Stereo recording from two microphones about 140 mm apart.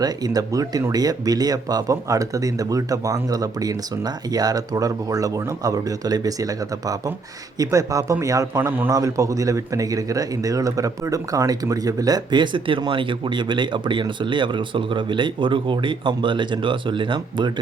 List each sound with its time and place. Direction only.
0.0 s a man's voice: 25° right (ahead or behind)